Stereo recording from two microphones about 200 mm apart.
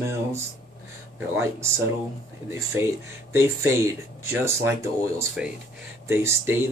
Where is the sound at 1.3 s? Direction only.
10° right (ahead or behind).